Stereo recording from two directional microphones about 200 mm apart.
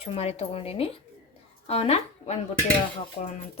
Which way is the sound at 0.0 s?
30° left (ahead or behind).